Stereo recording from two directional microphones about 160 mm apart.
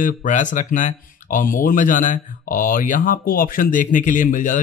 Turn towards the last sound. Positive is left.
turn(degrees=55)  # may be behind; listen again after turning